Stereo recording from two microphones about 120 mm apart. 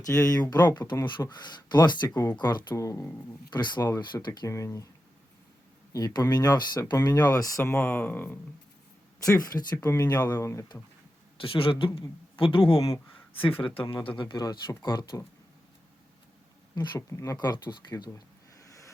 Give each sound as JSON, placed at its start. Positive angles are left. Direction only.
{"t": 0.0, "sound": "speech", "side_deg": 30}
{"t": 2.7, "sound": "speech", "side_deg": 25}
{"t": 3.5, "sound": "speech", "side_deg": 40}
{"t": 4.4, "sound": "speech", "side_deg": 25}
{"t": 5.9, "sound": "speech", "side_deg": 30}
{"t": 7.6, "sound": "speech", "side_deg": 20}
{"t": 9.2, "sound": "speech", "side_deg": 30}
{"t": 11.3, "sound": "speech", "side_deg": 50}
{"t": 16.7, "sound": "speech", "side_deg": 40}
{"t": 17.1, "sound": "speech", "side_deg": 25}
{"t": 17.3, "sound": "speech", "side_deg": 35}
{"t": 18.6, "sound": "vehicle", "side_deg": 25}